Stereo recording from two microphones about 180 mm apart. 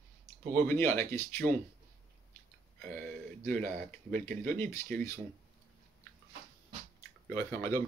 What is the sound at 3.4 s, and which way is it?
Speech, 10° left (ahead or behind).